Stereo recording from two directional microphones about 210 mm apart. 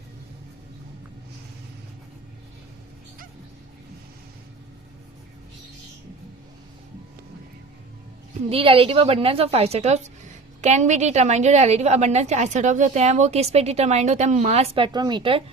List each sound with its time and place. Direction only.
8.4 s a woman's voice: 25° right (ahead or behind)